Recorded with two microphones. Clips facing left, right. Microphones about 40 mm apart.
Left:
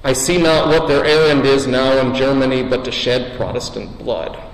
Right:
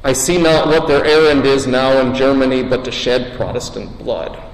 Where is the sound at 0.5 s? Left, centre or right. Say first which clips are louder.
Right 1 dB; centre.